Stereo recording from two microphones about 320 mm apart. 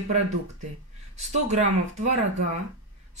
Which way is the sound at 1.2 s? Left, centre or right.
Right.